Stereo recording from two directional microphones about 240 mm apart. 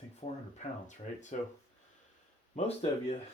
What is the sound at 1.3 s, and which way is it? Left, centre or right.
Speech, left.